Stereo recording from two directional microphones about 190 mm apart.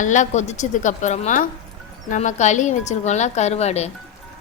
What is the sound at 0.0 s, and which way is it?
A woman's voice, 40° left (ahead or behind).